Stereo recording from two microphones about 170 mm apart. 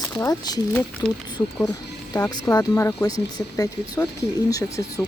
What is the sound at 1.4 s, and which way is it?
Speech, 25° left (ahead or behind).